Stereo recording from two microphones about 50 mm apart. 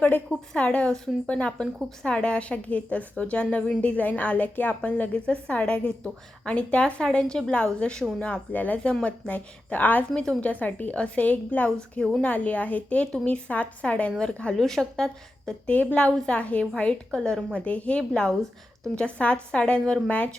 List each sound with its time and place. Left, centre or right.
0.3 s a woman's voice: left
8.2 s a woman's voice: left
9.6 s a woman's voice: left
14.5 s a woman's voice: centre
15.6 s a woman's voice: left
18.1 s a woman's voice: centre